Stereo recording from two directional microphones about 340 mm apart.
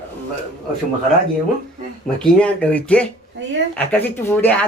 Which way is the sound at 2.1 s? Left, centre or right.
Centre.